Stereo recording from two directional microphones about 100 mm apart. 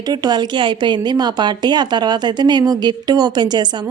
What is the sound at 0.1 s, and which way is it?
A woman's voice, 45° right (ahead or behind).